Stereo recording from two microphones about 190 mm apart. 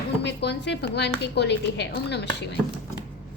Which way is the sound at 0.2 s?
65° left (ahead or behind).